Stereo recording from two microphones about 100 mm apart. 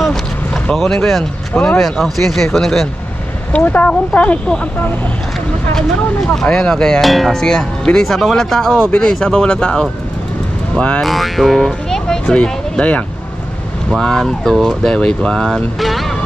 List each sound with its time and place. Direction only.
0.7 s speech: centre (ahead or behind)
3.5 s speech: 15° left (ahead or behind)
11.1 s speech: centre (ahead or behind)